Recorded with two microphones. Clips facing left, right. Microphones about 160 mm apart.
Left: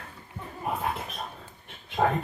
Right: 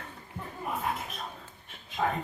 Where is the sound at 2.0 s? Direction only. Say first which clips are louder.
Left 5 dB; 55° left (ahead or behind).